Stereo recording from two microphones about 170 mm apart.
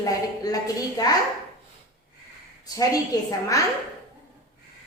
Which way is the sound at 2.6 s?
20° left (ahead or behind).